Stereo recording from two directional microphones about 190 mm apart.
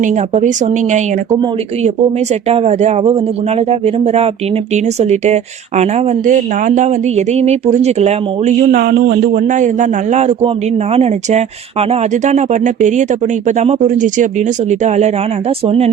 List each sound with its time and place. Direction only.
0.0 s speech: 40° right (ahead or behind)
8.7 s speech: 50° right (ahead or behind); by 15.9 s 30° right (ahead or behind)